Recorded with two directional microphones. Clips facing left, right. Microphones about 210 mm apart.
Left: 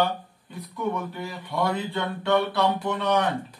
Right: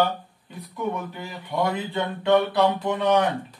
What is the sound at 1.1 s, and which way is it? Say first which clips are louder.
Speech: right 1 dB; 20° right (ahead or behind).